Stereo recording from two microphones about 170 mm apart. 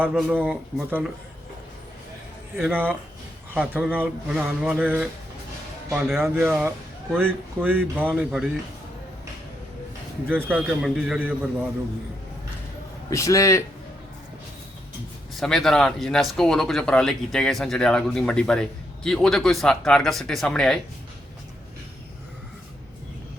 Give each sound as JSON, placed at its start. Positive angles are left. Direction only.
{"t": 0.0, "sound": "speech", "side_deg": -5}
{"t": 2.6, "sound": "speech", "side_deg": -5}
{"t": 6.1, "sound": "speech", "side_deg": -15}
{"t": 10.2, "sound": "speech", "side_deg": -10}
{"t": 13.1, "sound": "a man's voice", "side_deg": 20}
{"t": 15.4, "sound": "speech", "side_deg": 0}